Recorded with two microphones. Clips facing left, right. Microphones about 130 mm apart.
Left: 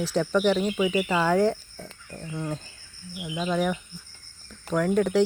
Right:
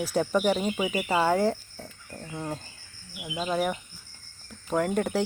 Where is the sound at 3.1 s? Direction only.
5° right (ahead or behind).